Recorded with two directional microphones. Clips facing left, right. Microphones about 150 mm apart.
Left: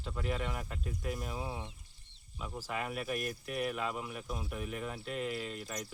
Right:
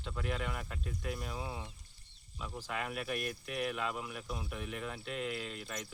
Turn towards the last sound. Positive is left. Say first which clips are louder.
# left 2 dB
turn(degrees=0)  # may be behind; listen again after turning